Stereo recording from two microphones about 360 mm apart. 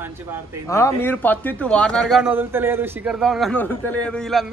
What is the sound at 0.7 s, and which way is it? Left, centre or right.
Speech, centre.